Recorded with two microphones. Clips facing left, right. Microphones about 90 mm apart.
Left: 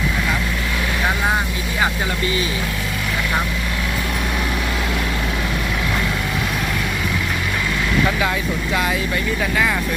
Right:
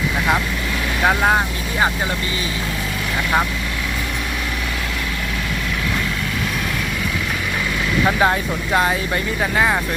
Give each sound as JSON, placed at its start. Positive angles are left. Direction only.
{"t": 8.2, "sound": "speech", "side_deg": -35}